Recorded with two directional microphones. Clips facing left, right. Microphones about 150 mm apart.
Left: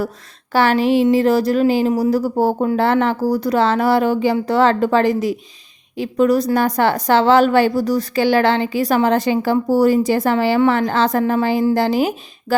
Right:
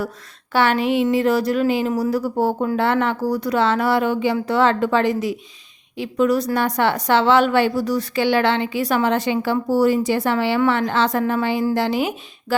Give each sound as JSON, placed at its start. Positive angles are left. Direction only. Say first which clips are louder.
{"t": 0.5, "sound": "a woman's voice", "louder": "left 3 dB", "side_deg": 35}